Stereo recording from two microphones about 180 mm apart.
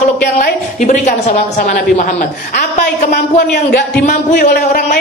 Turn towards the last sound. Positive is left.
turn(degrees=55)  # may be behind; listen again after turning